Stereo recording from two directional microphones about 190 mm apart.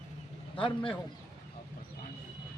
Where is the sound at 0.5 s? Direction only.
25° left (ahead or behind).